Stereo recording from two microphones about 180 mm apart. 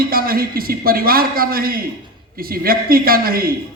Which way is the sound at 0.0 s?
55° right (ahead or behind).